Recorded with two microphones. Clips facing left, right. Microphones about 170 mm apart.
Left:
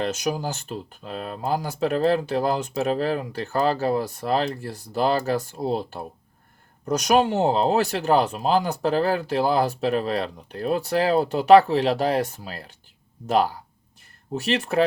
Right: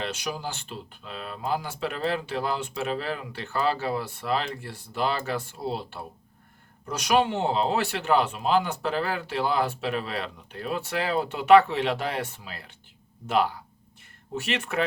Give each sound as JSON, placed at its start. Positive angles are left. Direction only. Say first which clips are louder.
{"t": 0.0, "sound": "speech", "louder": "left 6 dB", "side_deg": 45}